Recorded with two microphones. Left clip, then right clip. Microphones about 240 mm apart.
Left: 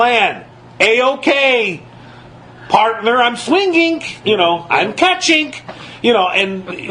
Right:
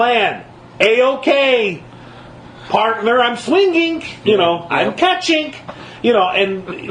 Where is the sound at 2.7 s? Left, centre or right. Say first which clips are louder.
Left 2 dB; left.